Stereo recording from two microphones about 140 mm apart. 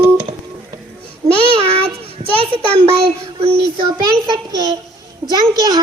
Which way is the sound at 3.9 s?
25° right (ahead or behind).